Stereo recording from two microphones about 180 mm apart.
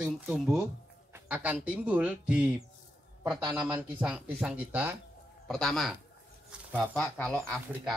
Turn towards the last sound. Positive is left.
turn(degrees=5)  # may be behind; listen again after turning